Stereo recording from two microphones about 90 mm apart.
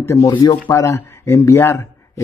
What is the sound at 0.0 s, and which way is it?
Speech, 30° left (ahead or behind).